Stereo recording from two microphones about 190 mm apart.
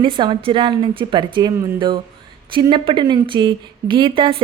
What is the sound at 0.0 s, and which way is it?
A woman's voice, 25° right (ahead or behind).